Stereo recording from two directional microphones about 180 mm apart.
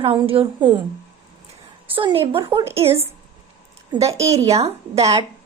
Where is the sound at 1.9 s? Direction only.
30° right (ahead or behind).